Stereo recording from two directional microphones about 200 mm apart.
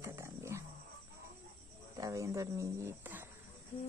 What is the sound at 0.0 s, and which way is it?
Wild animals, 15° right (ahead or behind).